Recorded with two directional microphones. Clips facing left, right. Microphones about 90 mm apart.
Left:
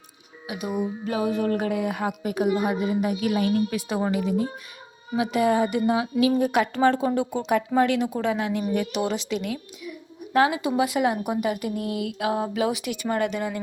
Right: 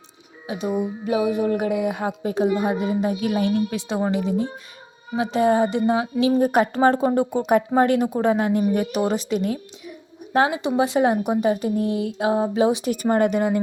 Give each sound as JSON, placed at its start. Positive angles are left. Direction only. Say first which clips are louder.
{"t": 0.4, "sound": "a woman's voice", "louder": "right 3 dB", "side_deg": -30}
{"t": 12.9, "sound": "speech", "louder": "right 6 dB", "side_deg": -40}